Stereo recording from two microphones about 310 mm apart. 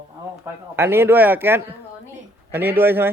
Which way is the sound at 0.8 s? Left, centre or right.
Centre.